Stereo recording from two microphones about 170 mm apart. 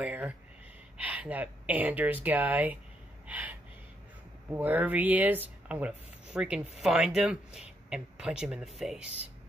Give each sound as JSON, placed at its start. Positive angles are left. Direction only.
{"t": 0.0, "sound": "speech", "side_deg": -10}
{"t": 3.3, "sound": "gasp", "side_deg": -10}
{"t": 4.5, "sound": "speech", "side_deg": -10}